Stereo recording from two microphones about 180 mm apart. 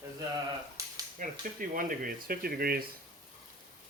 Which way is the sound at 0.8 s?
20° right (ahead or behind).